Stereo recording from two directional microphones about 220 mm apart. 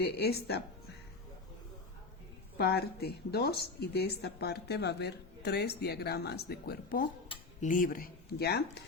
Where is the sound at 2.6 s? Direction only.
45° left (ahead or behind).